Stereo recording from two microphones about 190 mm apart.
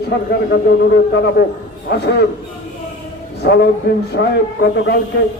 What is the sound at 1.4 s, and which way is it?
Speech, 55° left (ahead or behind).